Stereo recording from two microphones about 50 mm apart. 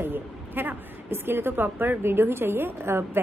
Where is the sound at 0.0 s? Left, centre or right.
Right.